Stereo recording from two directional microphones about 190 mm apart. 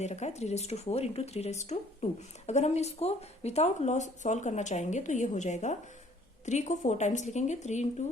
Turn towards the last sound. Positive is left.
turn(degrees=40)  # may be behind; listen again after turning